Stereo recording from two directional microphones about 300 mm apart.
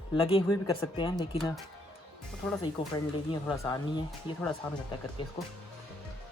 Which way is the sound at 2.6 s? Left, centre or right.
Centre.